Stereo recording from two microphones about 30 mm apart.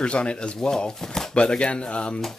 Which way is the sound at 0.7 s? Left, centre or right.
Left.